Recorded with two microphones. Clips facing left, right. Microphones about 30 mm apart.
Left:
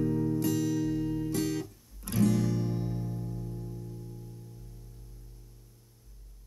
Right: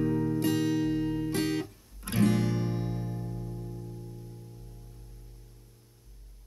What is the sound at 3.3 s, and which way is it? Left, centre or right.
Music, centre.